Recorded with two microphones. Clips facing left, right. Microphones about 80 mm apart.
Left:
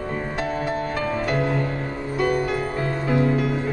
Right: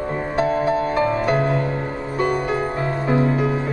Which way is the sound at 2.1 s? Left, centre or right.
Right.